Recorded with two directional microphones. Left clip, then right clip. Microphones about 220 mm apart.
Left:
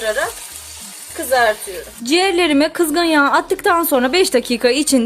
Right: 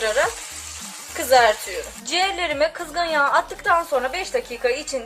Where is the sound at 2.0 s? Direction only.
15° left (ahead or behind).